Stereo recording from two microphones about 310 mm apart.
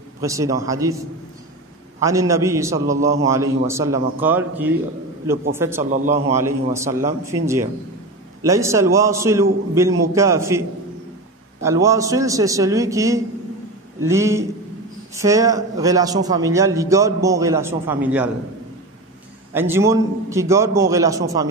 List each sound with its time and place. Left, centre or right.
0.2 s a man's voice: centre
2.0 s a man's voice: centre
5.8 s a man's voice: right
6.2 s a man's voice: centre
11.6 s a man's voice: centre
19.5 s a man's voice: centre